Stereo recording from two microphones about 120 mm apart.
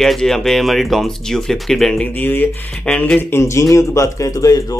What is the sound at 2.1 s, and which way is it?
Speech, 15° left (ahead or behind).